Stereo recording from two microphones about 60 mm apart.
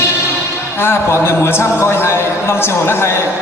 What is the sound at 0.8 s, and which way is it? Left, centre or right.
A man's voice, left.